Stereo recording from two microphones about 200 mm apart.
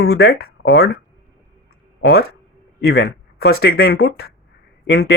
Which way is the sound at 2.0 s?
50° left (ahead or behind).